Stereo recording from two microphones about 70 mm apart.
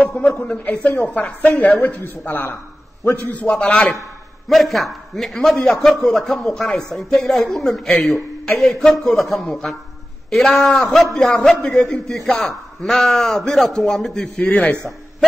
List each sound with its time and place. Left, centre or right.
0.0 s a sound: left
0.5 s a man's voice: centre
3.4 s a man's voice: centre
4.5 s a man's voice: centre
14.4 s a man's voice: centre